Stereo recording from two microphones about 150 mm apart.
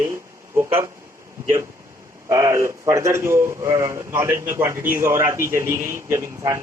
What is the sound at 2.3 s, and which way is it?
Speech, 20° right (ahead or behind).